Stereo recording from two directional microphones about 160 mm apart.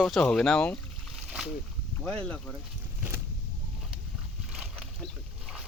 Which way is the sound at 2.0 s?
5° left (ahead or behind).